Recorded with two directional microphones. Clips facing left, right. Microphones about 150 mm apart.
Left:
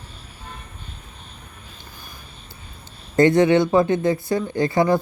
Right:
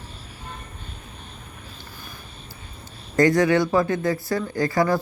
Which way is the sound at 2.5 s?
25° left (ahead or behind).